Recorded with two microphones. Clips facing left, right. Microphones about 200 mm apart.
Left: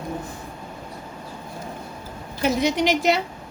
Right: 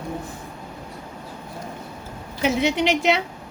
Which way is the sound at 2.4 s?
45° left (ahead or behind).